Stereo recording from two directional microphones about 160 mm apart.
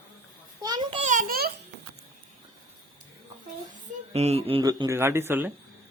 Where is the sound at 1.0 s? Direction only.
55° right (ahead or behind).